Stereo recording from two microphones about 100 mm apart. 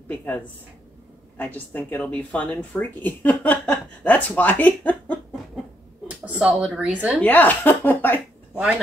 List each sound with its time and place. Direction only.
0.1 s speech: 15° left (ahead or behind)
1.4 s speech: 15° left (ahead or behind)
6.0 s a sound: 15° right (ahead or behind)
6.8 s a woman's voice: 15° right (ahead or behind)
7.2 s speech: 15° left (ahead or behind)